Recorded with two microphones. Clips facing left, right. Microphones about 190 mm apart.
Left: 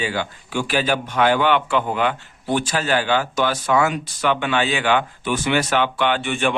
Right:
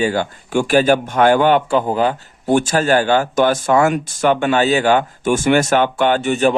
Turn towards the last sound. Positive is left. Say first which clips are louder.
# right 6 dB
turn(degrees=-40)  # may be behind; listen again after turning